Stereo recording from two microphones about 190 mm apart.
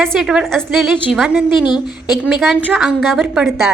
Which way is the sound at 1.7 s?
25° left (ahead or behind).